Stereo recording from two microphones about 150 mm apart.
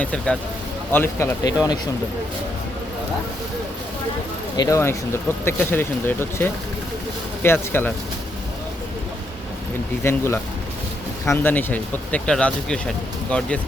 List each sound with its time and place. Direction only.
0.0 s speech: 5° left (ahead or behind); by 1.8 s 25° left (ahead or behind)
4.5 s speech: 25° left (ahead or behind)
10.0 s speech: 15° left (ahead or behind)